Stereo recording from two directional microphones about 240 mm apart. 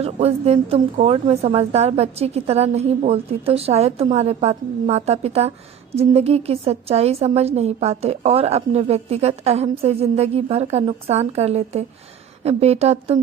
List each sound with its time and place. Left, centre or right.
0.0 s a woman's voice: right